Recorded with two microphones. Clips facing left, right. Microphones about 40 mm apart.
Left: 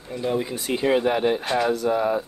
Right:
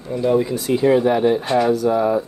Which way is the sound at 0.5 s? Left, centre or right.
Left.